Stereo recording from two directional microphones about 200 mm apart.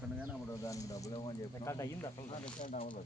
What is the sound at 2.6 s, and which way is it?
Speech, 40° left (ahead or behind).